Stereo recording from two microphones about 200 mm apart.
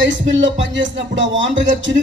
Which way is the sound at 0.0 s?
65° right (ahead or behind).